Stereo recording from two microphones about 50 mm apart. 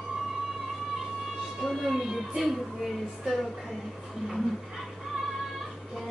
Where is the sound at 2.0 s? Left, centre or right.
Centre.